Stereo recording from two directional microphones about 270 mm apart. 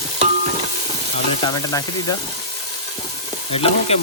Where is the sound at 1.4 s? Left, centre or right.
Centre.